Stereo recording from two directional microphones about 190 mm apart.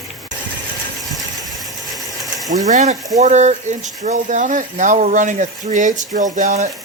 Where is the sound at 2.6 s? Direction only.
40° right (ahead or behind).